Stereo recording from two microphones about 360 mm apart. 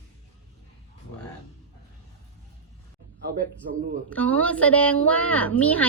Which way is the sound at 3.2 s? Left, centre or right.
Right.